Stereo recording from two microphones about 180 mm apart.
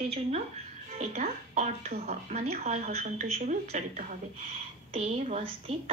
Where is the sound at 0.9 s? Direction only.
40° right (ahead or behind).